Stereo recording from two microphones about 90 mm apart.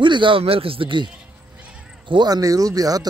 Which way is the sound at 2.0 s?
55° right (ahead or behind).